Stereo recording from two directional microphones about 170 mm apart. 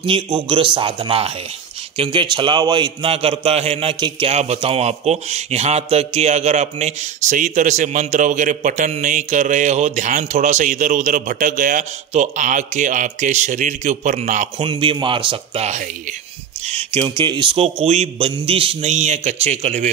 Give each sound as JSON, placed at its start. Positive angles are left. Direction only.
{"t": 0.5, "sound": "a man's voice", "side_deg": -30}
{"t": 14.6, "sound": "a man's voice", "side_deg": -30}